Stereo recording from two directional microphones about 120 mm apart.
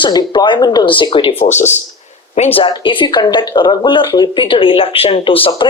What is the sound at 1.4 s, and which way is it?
Speech, 75° left (ahead or behind).